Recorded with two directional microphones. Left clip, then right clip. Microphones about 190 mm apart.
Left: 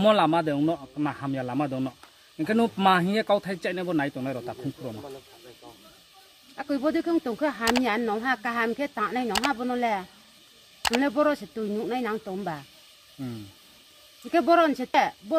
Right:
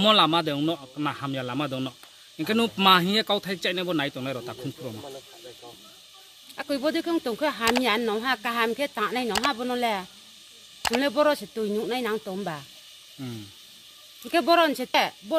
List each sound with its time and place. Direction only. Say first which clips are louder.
0.0 s speech: right 1 dB; 20° left (ahead or behind)
6.5 s speech: even; 15° right (ahead or behind)
14.3 s speech: even; 20° right (ahead or behind)